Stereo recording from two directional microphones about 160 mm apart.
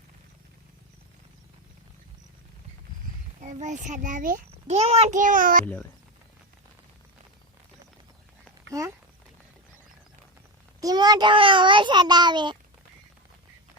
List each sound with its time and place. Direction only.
3.4 s a child's voice: 50° right (ahead or behind)
4.8 s a child's voice: 40° right (ahead or behind); by 5.6 s 60° right (ahead or behind)
10.8 s a sound: 25° right (ahead or behind)